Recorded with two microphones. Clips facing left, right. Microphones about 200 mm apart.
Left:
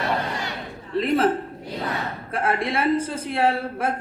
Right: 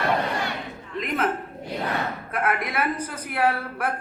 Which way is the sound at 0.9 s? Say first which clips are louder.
Left 6 dB; 30° left (ahead or behind).